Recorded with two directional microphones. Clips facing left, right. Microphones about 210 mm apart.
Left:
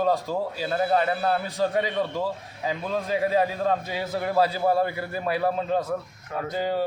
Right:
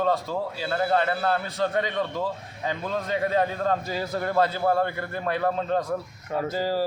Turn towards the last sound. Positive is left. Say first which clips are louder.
# right 1 dB
turn(degrees=0)  # may be behind; listen again after turning